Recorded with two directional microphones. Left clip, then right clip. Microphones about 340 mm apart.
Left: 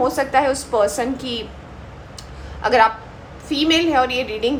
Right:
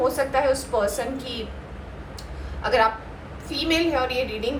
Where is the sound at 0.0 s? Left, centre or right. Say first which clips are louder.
Left 4 dB; left.